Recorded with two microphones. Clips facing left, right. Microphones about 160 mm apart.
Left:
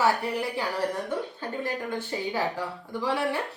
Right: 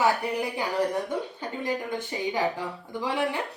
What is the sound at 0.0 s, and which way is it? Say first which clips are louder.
Speech: even; 15° right (ahead or behind).